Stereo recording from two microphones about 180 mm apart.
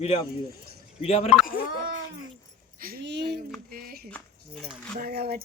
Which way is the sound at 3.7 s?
55° right (ahead or behind).